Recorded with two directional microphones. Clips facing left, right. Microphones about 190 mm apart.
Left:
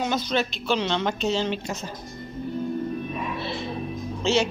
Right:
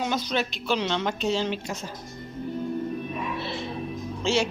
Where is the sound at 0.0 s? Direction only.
10° right (ahead or behind).